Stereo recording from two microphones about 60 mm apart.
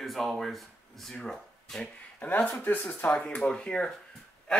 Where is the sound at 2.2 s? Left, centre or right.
Left.